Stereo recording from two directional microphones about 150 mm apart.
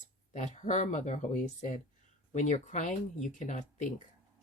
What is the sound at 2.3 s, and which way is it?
Speech, 55° left (ahead or behind).